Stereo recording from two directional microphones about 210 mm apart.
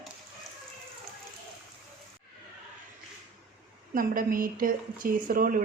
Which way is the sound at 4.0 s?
40° right (ahead or behind).